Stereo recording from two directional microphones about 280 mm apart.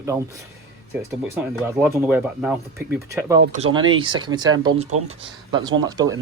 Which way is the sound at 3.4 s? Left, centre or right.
Right.